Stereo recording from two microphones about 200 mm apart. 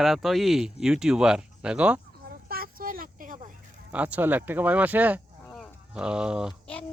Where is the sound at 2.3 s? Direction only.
50° right (ahead or behind).